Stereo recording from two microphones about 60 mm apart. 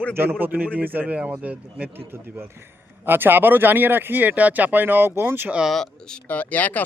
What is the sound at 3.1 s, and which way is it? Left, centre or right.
Speech, right.